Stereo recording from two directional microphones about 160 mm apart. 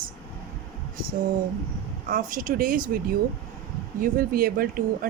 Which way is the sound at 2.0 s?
60° right (ahead or behind).